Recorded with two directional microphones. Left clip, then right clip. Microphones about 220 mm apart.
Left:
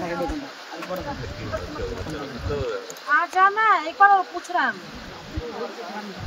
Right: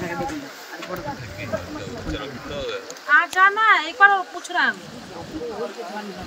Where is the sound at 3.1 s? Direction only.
45° left (ahead or behind).